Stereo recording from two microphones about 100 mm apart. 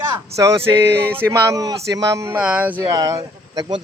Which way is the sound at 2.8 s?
40° right (ahead or behind).